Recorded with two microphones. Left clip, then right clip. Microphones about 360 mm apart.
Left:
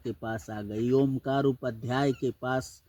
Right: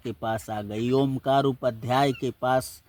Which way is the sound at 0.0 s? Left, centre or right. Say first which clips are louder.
Right 5 dB; centre.